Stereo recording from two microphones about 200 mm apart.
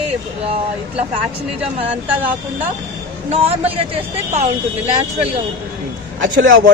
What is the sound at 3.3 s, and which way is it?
Speech, 30° right (ahead or behind).